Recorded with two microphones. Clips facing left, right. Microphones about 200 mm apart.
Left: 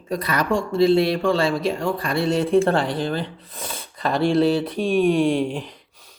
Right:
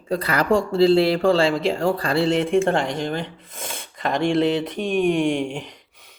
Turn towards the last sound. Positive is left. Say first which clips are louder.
# left 2 dB
turn(degrees=-15)  # may be behind; listen again after turning